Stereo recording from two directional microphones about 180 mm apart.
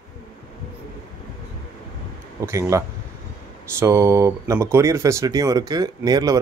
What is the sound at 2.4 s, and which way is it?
Speech, 15° right (ahead or behind).